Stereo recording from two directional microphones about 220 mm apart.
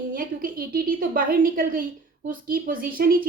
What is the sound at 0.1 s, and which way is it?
A woman's voice, 40° right (ahead or behind).